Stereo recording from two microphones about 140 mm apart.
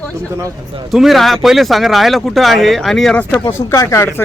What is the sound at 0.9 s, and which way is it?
Speech, centre (ahead or behind).